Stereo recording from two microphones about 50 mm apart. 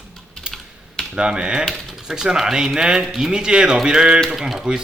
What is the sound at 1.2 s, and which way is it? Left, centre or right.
A man's voice, centre.